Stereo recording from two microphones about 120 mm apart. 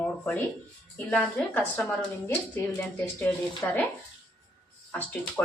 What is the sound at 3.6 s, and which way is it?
Speech, 20° left (ahead or behind).